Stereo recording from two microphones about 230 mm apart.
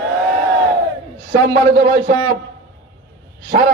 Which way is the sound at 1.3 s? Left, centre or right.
Right.